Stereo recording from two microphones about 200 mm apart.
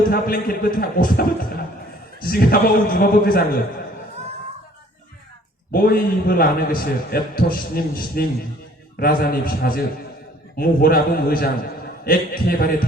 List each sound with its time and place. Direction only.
0.1 s a man's voice: 45° left (ahead or behind)
2.2 s a man's voice: 45° left (ahead or behind)
5.7 s a man's voice: 50° left (ahead or behind)